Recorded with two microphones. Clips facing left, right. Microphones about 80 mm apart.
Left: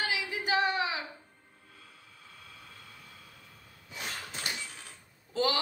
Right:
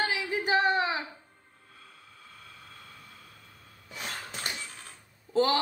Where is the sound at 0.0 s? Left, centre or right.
Right.